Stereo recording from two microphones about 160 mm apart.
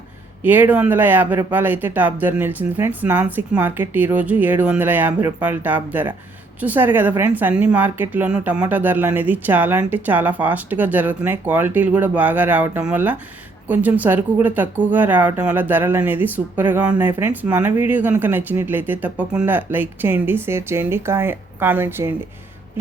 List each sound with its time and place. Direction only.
0.4 s speech: 10° right (ahead or behind)